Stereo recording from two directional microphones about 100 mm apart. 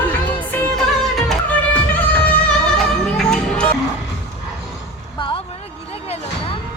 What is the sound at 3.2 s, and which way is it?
Music, 5° left (ahead or behind).